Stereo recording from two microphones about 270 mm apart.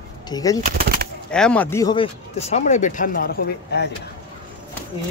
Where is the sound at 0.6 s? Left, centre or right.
Right.